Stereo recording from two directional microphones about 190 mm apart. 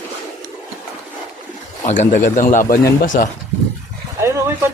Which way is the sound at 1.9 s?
40° left (ahead or behind).